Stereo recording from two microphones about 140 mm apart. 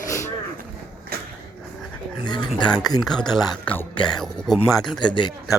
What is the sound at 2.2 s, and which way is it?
Speech, 30° left (ahead or behind).